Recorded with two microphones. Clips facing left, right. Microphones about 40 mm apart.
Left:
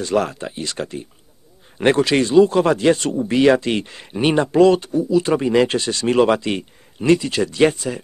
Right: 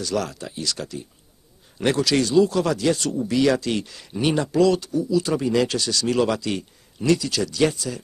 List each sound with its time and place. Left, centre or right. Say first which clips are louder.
0.0 s speech: left 6 dB; left